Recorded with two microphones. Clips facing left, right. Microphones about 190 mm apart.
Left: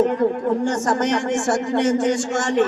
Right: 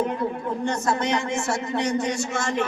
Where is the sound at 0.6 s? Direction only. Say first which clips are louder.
Left 4 dB; 70° left (ahead or behind).